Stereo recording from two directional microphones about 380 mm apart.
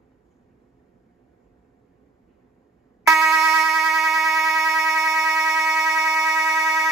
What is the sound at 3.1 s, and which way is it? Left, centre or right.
Telephone bell ringing, centre.